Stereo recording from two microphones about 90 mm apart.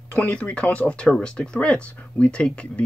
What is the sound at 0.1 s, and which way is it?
Speech, 15° left (ahead or behind).